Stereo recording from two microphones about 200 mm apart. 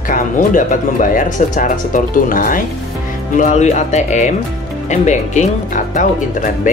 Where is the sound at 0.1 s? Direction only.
40° left (ahead or behind).